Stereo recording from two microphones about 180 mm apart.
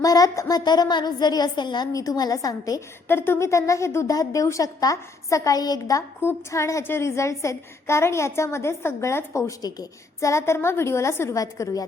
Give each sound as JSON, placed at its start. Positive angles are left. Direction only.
{"t": 0.0, "sound": "a woman's voice", "side_deg": 20}